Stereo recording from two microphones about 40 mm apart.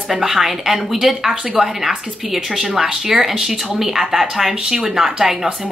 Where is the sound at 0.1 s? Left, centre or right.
Centre.